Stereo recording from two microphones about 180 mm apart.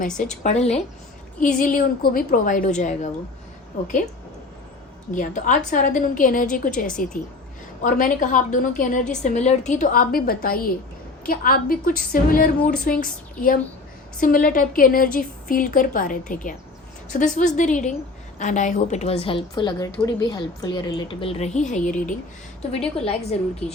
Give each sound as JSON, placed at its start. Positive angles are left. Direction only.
{"t": 0.1, "sound": "a woman's voice", "side_deg": 5}
{"t": 0.4, "sound": "a woman's voice", "side_deg": 35}
{"t": 1.5, "sound": "a woman's voice", "side_deg": 50}
{"t": 5.1, "sound": "a woman's voice", "side_deg": 45}
{"t": 23.0, "sound": "a woman's voice", "side_deg": 35}